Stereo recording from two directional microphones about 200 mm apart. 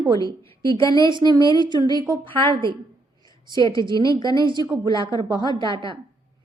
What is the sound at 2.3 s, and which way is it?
Speech, 10° left (ahead or behind).